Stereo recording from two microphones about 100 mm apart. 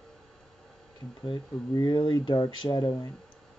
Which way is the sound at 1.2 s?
50° left (ahead or behind).